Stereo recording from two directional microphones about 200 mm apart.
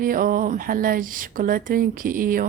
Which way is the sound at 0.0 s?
45° right (ahead or behind).